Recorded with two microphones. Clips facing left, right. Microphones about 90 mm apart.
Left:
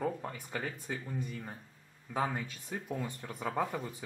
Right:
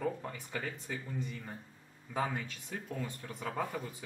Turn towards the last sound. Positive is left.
turn(degrees=5)  # may be behind; listen again after turning